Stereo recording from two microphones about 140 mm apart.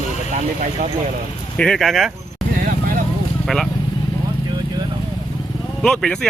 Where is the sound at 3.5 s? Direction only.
5° left (ahead or behind).